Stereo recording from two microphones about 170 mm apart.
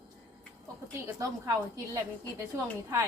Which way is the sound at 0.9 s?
15° right (ahead or behind).